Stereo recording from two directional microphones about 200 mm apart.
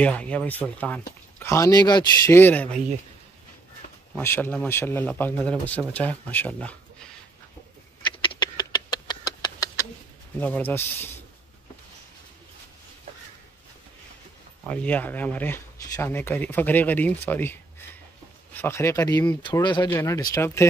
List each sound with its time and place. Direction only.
0.0 s speech: 5° left (ahead or behind)
4.2 s speech: 10° left (ahead or behind)
8.0 s a sound: 25° left (ahead or behind)
10.4 s speech: 10° left (ahead or behind)
14.7 s speech: 5° left (ahead or behind)
19.9 s speech: 10° left (ahead or behind)